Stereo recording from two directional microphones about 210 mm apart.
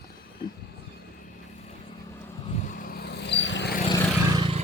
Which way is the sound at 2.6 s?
40° left (ahead or behind).